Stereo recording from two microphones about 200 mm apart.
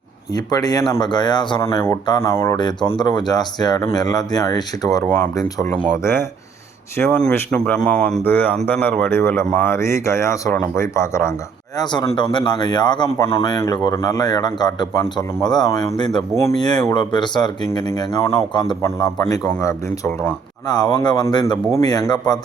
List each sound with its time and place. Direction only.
0.3 s speech: 20° left (ahead or behind)